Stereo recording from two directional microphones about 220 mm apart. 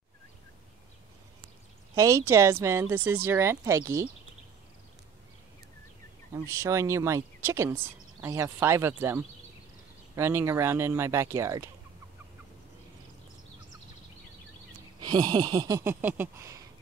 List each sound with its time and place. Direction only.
2.0 s speech: 15° right (ahead or behind)
6.3 s speech: 15° right (ahead or behind)
15.0 s speech: 20° right (ahead or behind)